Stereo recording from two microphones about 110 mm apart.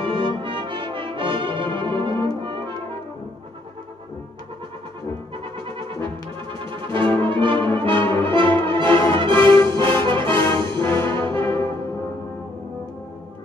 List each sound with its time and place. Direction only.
0.0 s brass instrument: 50° right (ahead or behind)
5.4 s music: 50° right (ahead or behind)
6.0 s brass instrument: 50° right (ahead or behind)
9.1 s music: 50° right (ahead or behind)
10.8 s brass instrument: 25° left (ahead or behind)
11.1 s brass instrument: 50° right (ahead or behind)